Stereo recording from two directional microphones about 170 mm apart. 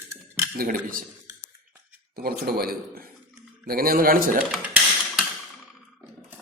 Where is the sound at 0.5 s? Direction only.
55° right (ahead or behind).